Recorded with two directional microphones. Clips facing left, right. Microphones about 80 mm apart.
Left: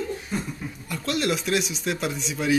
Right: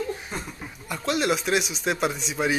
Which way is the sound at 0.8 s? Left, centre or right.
Centre.